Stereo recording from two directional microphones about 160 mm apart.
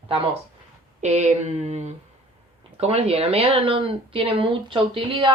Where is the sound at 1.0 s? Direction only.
45° right (ahead or behind).